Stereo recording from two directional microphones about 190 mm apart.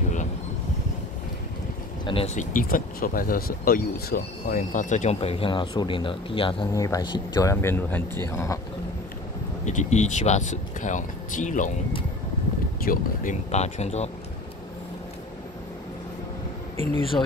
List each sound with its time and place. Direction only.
2.0 s speech: 30° left (ahead or behind)
6.7 s speech: 15° left (ahead or behind)
9.7 s speech: 40° left (ahead or behind)
12.8 s speech: 45° left (ahead or behind)